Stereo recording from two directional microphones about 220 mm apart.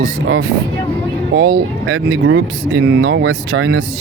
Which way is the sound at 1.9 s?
60° right (ahead or behind).